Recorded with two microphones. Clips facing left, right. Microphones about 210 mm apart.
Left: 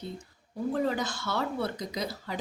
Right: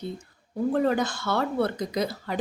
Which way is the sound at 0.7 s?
55° right (ahead or behind).